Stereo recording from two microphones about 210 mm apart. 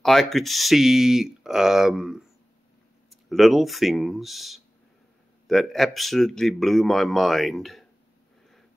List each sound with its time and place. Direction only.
0.0 s speech: centre (ahead or behind)